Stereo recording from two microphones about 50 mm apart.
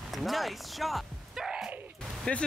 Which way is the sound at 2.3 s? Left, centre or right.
Left.